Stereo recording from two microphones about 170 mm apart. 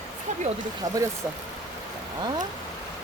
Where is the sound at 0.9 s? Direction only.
45° right (ahead or behind).